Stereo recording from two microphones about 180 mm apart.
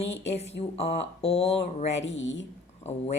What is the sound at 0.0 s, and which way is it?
Speech, 75° left (ahead or behind).